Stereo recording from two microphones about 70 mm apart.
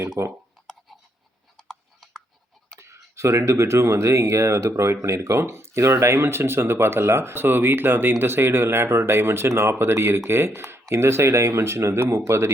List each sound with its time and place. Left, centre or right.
0.2 s speech: right
1.5 s a sound: centre
2.7 s speech: right